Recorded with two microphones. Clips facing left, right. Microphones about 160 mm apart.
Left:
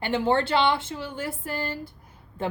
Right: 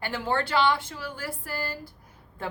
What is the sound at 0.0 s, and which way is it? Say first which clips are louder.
A woman's voice: left 5 dB; 25° left (ahead or behind).